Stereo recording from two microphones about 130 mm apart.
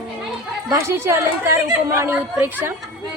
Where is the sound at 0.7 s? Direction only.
20° right (ahead or behind).